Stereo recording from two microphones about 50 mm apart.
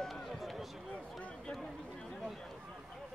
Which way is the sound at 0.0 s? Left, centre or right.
Centre.